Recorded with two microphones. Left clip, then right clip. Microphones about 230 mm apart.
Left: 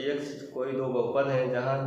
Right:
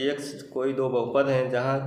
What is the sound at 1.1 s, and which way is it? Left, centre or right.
Speech, right.